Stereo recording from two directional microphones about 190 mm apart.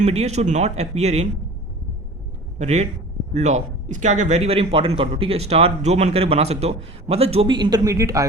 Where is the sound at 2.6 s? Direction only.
35° right (ahead or behind).